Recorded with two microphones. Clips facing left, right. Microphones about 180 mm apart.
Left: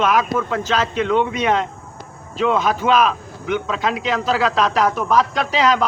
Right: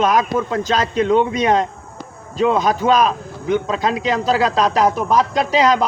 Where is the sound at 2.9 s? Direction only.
35° right (ahead or behind).